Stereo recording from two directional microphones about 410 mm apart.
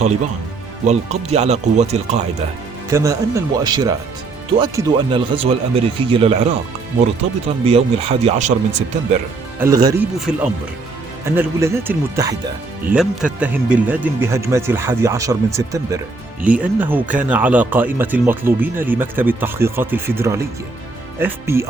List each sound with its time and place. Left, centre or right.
0.9 s speech: centre
11.3 s speech: centre